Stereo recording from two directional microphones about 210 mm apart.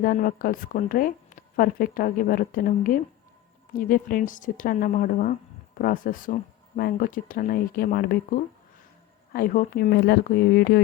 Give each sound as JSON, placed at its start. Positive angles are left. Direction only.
{"t": 0.0, "sound": "a woman's voice", "side_deg": 45}